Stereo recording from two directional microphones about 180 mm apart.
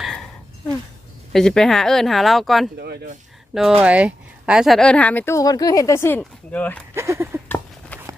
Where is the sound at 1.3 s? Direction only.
5° left (ahead or behind).